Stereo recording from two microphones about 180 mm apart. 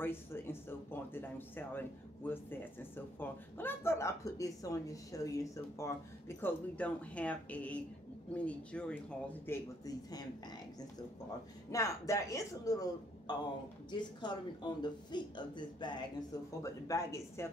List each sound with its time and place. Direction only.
0.0 s speech: 10° left (ahead or behind)
11.7 s speech: 20° left (ahead or behind)